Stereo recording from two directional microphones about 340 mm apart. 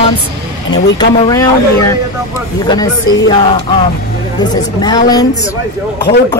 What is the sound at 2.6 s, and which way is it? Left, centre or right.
Speech, centre.